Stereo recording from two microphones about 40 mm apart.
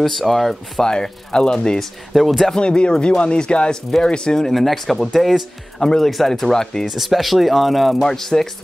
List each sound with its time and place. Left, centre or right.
0.0 s speech: centre
0.8 s speech: centre
1.8 s speech: centre
2.5 s speech: left
4.5 s speech: centre
5.8 s speech: centre
6.9 s speech: centre
8.0 s speech: centre